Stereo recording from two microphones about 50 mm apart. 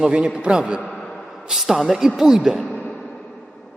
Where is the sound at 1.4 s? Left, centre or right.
Centre.